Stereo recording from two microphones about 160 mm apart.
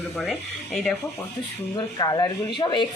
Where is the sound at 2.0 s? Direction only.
25° left (ahead or behind).